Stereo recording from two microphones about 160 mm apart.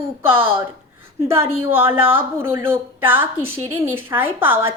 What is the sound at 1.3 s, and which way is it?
A woman's voice, 15° right (ahead or behind).